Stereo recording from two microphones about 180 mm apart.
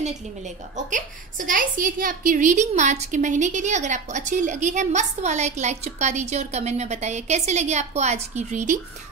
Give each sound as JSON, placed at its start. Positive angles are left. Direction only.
{"t": 0.8, "sound": "a woman's voice", "side_deg": -45}